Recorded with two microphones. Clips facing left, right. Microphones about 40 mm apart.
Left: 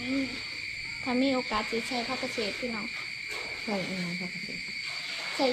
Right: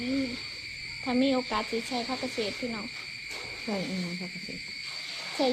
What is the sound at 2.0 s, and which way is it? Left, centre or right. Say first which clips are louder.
Speech: even; centre.